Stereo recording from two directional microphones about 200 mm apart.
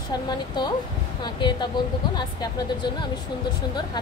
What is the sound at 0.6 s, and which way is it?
Speech, 20° left (ahead or behind).